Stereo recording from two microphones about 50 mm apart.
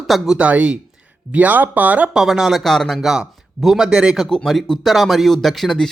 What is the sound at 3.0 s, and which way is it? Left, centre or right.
Speech, centre.